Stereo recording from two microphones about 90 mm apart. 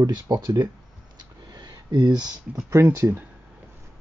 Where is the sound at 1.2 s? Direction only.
55° right (ahead or behind).